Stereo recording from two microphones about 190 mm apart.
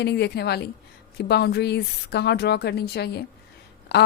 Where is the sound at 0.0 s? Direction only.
60° left (ahead or behind).